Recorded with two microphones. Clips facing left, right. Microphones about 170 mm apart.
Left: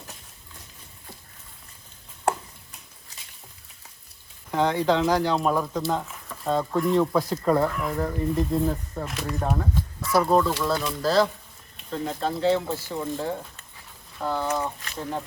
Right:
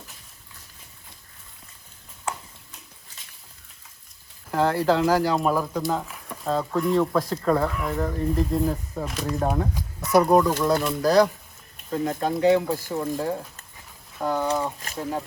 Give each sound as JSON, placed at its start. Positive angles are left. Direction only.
{"t": 4.5, "sound": "speech", "side_deg": -5}
{"t": 9.6, "sound": "speech", "side_deg": -20}